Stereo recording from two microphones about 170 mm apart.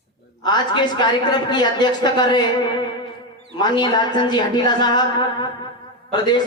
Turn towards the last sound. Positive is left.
turn(degrees=25)  # may be behind; listen again after turning